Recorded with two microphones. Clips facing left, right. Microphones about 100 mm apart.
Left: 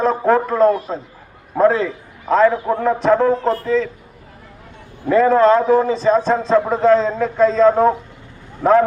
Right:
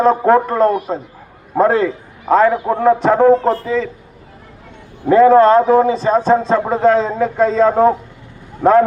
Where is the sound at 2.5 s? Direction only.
20° right (ahead or behind).